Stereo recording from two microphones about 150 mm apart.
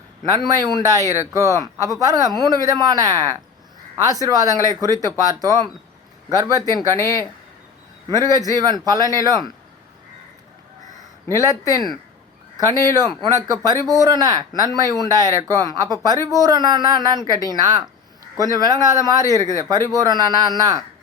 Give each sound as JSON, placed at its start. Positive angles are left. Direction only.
{"t": 0.3, "sound": "speech", "side_deg": -25}
{"t": 7.0, "sound": "speech", "side_deg": 20}
{"t": 8.1, "sound": "speech", "side_deg": -25}
{"t": 11.3, "sound": "speech", "side_deg": -25}